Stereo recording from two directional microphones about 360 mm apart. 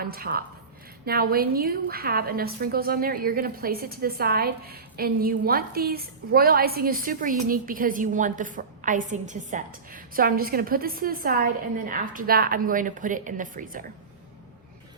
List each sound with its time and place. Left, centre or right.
0.0 s a woman's voice: right